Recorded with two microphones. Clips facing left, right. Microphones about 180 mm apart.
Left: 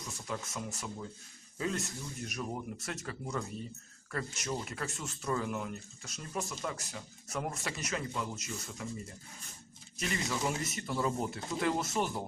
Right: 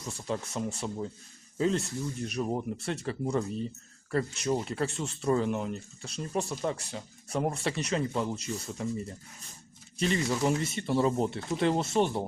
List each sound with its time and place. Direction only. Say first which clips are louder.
0.3 s speech: right 7 dB; 30° right (ahead or behind)
10.0 s speech: right 7 dB; 30° right (ahead or behind)